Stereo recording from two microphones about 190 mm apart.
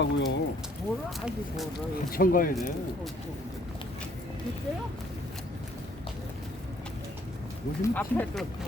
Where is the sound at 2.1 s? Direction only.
50° left (ahead or behind).